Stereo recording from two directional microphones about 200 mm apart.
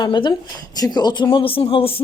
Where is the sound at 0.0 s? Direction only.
20° left (ahead or behind).